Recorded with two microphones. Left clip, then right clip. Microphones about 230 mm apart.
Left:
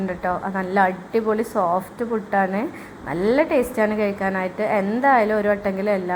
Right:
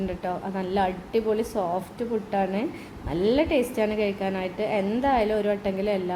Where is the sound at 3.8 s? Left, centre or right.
Left.